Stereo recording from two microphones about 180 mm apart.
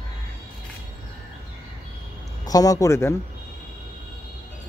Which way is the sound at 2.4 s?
20° left (ahead or behind).